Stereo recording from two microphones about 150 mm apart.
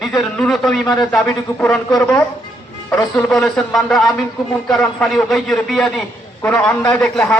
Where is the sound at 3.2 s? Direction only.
Centre (ahead or behind).